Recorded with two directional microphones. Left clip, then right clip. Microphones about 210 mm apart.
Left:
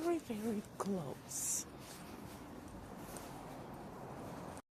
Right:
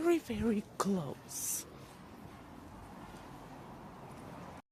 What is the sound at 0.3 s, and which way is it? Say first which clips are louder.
Speech: right 4 dB; 35° right (ahead or behind).